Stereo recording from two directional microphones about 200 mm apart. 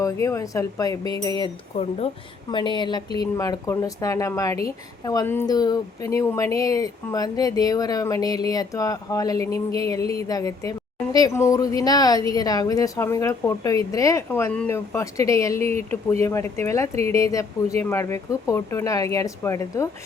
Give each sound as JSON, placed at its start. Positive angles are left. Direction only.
{"t": 0.0, "sound": "speech", "side_deg": 15}
{"t": 1.7, "sound": "speech", "side_deg": 30}
{"t": 16.9, "sound": "speech", "side_deg": -30}
{"t": 17.8, "sound": "speech", "side_deg": 15}